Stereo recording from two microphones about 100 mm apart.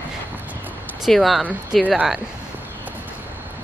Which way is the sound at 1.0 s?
Centre (ahead or behind).